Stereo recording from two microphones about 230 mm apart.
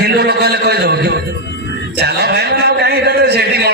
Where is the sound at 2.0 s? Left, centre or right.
Right.